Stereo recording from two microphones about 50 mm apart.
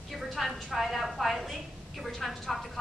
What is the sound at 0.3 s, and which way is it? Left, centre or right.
A woman's voice, centre.